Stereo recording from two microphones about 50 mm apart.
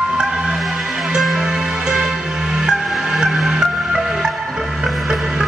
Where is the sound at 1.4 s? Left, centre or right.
Centre.